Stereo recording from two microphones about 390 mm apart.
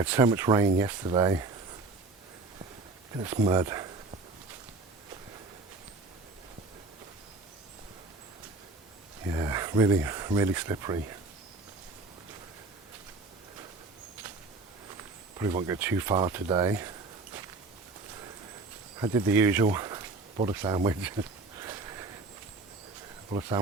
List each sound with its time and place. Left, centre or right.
0.0 s speech: centre
3.2 s speech: centre
9.3 s speech: centre
15.4 s speech: centre
18.9 s speech: centre
21.6 s a sound: centre
23.3 s speech: centre